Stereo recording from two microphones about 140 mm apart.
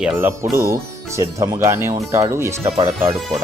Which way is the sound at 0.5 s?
20° right (ahead or behind).